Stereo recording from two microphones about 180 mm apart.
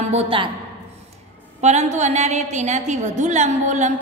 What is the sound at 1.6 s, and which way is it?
A woman's voice, 40° right (ahead or behind).